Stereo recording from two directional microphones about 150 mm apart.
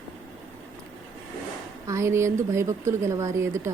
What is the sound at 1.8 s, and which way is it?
Speech, 20° right (ahead or behind).